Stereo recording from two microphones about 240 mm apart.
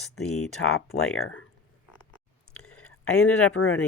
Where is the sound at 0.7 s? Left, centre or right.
Left.